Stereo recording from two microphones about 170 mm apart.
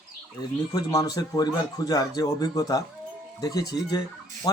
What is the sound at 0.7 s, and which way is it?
Speech, 20° left (ahead or behind).